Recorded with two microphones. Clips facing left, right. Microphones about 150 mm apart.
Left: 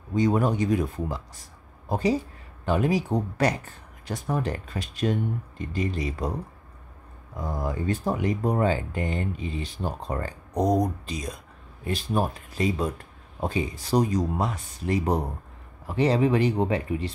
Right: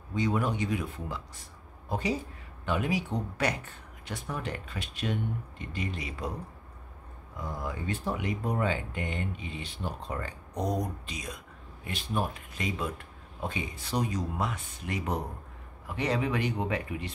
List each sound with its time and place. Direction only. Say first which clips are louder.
0.1 s speech: left 6 dB; 40° left (ahead or behind)
7.3 s speech: left 6 dB; 40° left (ahead or behind)